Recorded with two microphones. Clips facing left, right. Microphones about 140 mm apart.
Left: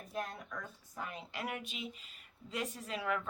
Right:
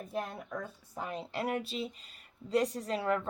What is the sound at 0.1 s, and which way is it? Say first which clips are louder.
A woman's voice: right 3 dB; 30° right (ahead or behind).